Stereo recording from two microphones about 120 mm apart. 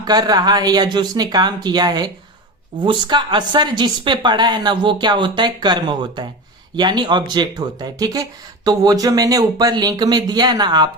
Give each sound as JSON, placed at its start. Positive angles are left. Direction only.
{"t": 0.0, "sound": "speech", "side_deg": -35}